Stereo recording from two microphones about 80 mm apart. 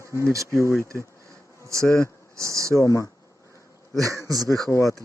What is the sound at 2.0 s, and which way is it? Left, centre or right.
Speech, right.